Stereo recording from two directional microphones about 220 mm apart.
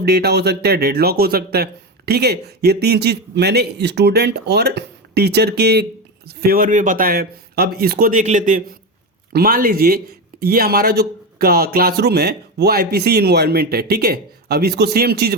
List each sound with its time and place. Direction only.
0.0 s a man's voice: 45° right (ahead or behind)